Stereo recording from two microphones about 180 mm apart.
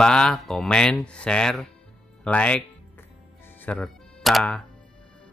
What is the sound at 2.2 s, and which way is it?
Ding, 5° left (ahead or behind).